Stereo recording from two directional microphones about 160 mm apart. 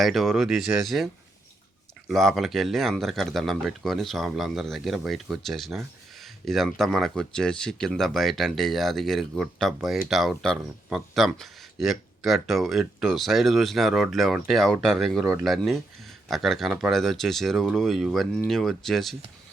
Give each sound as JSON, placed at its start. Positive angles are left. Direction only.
{"t": 0.0, "sound": "speech", "side_deg": 0}
{"t": 2.0, "sound": "speech", "side_deg": 0}